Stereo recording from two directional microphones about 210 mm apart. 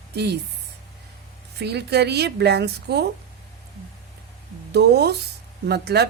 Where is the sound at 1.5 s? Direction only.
50° right (ahead or behind).